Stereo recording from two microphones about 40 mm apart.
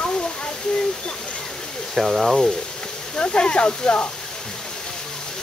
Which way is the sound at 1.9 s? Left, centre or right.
Centre.